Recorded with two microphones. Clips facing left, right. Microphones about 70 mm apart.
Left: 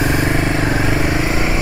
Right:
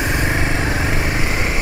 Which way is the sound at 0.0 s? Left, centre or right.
Centre.